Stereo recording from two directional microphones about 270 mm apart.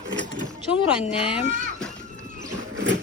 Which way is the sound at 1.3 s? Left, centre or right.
Centre.